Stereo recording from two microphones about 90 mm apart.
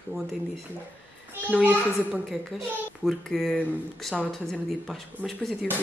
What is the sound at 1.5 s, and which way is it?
Speech, 15° right (ahead or behind).